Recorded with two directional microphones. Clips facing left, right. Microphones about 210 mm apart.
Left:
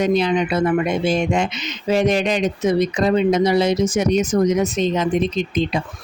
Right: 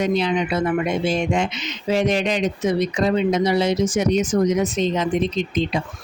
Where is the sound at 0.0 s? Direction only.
45° left (ahead or behind).